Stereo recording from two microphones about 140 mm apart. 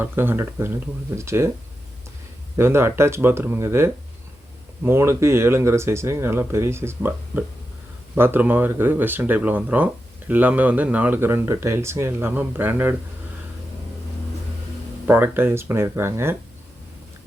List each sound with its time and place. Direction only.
0.0 s speech: 15° right (ahead or behind)
2.6 s speech: 15° right (ahead or behind)
15.0 s speech: 15° right (ahead or behind)